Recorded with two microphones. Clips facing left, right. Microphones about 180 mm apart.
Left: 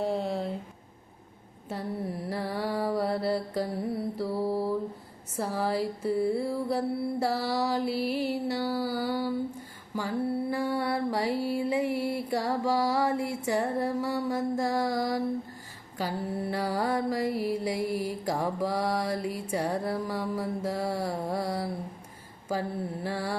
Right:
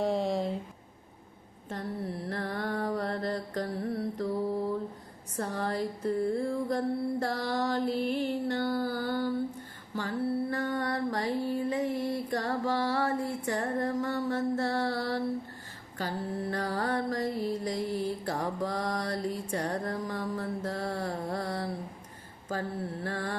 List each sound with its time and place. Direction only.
0.0 s a sound: 5° left (ahead or behind)
1.7 s mantra: 10° left (ahead or behind)
5.4 s mantra: 5° left (ahead or behind)
9.9 s music: 10° left (ahead or behind)
11.6 s mantra: 10° left (ahead or behind)